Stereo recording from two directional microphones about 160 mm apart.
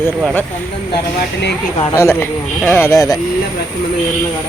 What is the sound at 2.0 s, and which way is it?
Speech, 15° left (ahead or behind).